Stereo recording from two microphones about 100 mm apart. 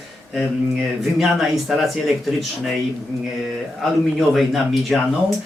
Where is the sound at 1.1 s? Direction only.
Centre (ahead or behind).